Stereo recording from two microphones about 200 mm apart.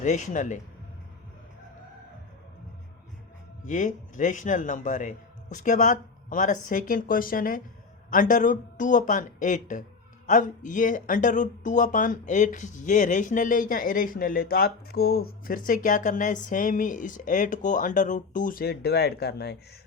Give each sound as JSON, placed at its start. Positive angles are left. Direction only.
{"t": 0.0, "sound": "speech", "side_deg": 35}
{"t": 3.7, "sound": "speech", "side_deg": 40}